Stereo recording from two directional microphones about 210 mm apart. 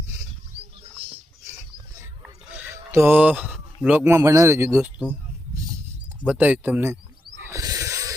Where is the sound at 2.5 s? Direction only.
10° right (ahead or behind).